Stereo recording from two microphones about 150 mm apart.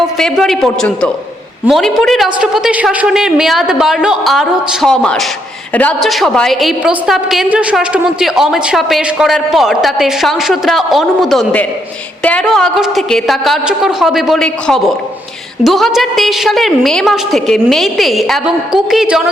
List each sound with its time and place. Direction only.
0.2 s a woman's voice: centre (ahead or behind)